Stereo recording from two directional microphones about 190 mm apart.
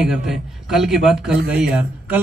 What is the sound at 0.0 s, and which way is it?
A man's voice, centre (ahead or behind).